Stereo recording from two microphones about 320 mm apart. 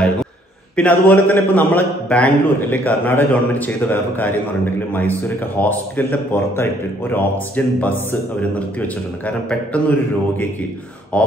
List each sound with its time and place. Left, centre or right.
0.7 s speech: centre